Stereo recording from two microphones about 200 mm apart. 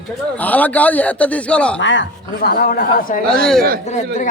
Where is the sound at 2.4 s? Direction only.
50° left (ahead or behind).